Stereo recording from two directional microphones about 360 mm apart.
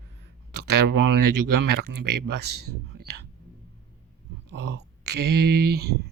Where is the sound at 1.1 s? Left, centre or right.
Right.